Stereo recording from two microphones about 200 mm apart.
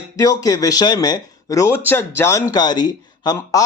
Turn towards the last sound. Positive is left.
turn(degrees=15)  # may be behind; listen again after turning